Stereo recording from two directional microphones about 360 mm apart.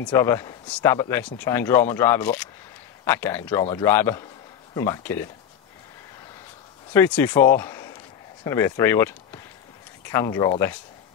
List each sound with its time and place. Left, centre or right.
0.0 s speech: centre
6.9 s speech: centre